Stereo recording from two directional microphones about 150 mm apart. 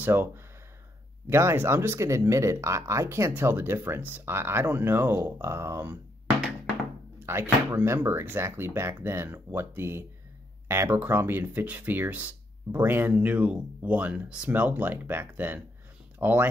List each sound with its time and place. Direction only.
0.0 s speech: 15° right (ahead or behind)
7.3 s speech: 15° right (ahead or behind)